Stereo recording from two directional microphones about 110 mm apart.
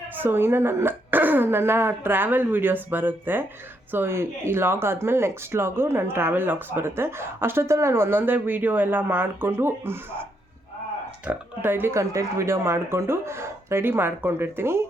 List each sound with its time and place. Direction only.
0.2 s speech: 20° right (ahead or behind)
11.3 s speech: 20° right (ahead or behind)